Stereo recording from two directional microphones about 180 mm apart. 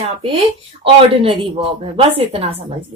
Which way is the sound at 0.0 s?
35° right (ahead or behind).